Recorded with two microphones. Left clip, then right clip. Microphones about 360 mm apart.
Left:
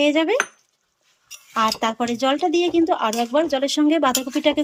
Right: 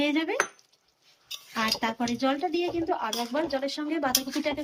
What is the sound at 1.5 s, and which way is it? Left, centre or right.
Speech, centre.